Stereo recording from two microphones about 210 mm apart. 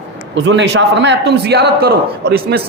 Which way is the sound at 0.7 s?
55° right (ahead or behind).